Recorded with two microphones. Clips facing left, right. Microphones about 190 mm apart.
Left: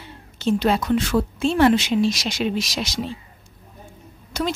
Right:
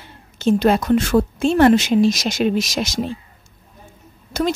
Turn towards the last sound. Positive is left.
turn(degrees=-45)  # may be behind; listen again after turning